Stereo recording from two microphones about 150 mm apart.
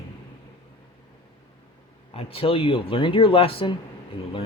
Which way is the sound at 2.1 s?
40° left (ahead or behind).